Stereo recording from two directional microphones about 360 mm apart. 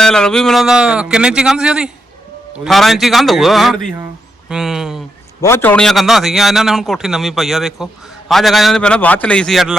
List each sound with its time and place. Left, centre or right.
0.0 s a man's voice: centre